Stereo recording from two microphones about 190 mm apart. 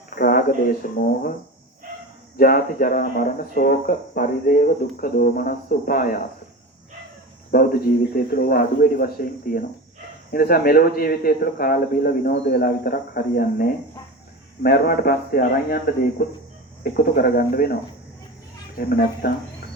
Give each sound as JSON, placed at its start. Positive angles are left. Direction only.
{"t": 0.1, "sound": "speech", "side_deg": 50}
{"t": 2.3, "sound": "speech", "side_deg": 50}
{"t": 7.5, "sound": "speech", "side_deg": 50}
{"t": 10.3, "sound": "speech", "side_deg": 55}
{"t": 18.8, "sound": "speech", "side_deg": 50}